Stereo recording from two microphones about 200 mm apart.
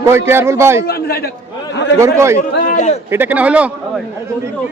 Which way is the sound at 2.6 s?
40° left (ahead or behind).